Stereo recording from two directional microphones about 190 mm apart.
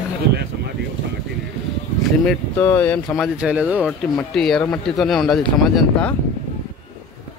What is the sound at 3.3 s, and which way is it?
A man's voice, 5° right (ahead or behind).